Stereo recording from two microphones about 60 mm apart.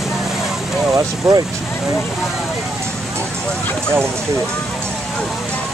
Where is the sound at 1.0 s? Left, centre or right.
Right.